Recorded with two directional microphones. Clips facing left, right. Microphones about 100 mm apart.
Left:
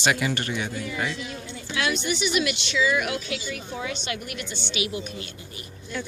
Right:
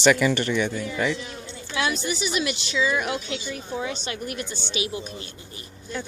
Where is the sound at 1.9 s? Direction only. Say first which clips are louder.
Left 1 dB; 35° right (ahead or behind).